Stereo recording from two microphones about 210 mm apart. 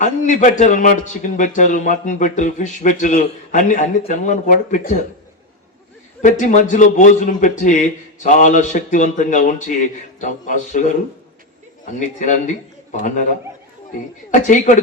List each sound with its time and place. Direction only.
0.0 s a man's voice: 35° left (ahead or behind)
6.2 s a man's voice: 35° left (ahead or behind)
14.3 s a man's voice: 35° left (ahead or behind)